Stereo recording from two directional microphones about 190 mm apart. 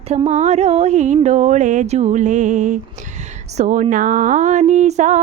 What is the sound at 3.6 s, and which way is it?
Speech, 40° right (ahead or behind).